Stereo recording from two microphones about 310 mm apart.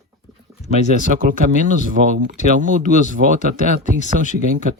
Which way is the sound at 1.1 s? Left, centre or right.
Right.